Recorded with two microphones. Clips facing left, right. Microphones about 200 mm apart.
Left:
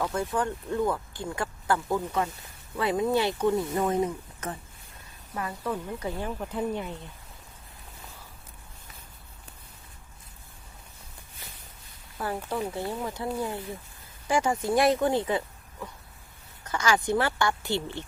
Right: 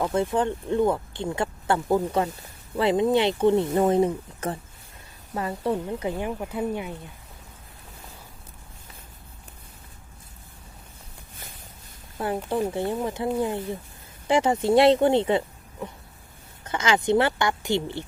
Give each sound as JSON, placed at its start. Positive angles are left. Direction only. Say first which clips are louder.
{"t": 0.0, "sound": "speech", "louder": "right 5 dB", "side_deg": -20}
{"t": 12.1, "sound": "speech", "louder": "right 5 dB", "side_deg": -20}